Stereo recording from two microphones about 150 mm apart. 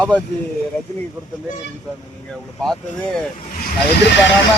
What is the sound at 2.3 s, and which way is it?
Speech, 5° left (ahead or behind).